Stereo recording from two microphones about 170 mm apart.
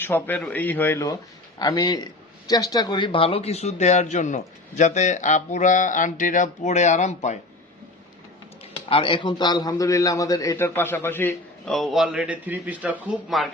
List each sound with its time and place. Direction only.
0.0 s a man's voice: 10° left (ahead or behind); by 7.3 s 45° left (ahead or behind)
8.9 s a man's voice: 30° left (ahead or behind); by 13.5 s centre (ahead or behind)